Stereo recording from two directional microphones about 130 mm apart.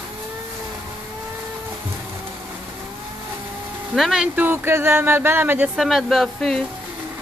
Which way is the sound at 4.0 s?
5° right (ahead or behind).